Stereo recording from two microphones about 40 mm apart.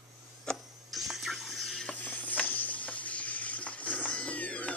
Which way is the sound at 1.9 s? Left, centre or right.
Left.